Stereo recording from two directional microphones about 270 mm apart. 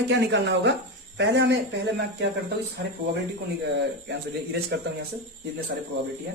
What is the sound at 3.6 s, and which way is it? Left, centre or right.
Speech, right.